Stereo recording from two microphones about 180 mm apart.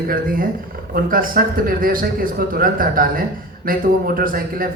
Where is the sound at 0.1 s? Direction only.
50° right (ahead or behind).